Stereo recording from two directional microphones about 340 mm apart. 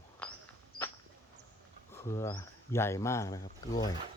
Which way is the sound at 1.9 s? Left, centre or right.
Centre.